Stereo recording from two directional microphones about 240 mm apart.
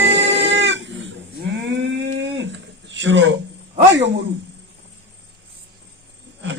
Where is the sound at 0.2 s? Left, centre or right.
Right.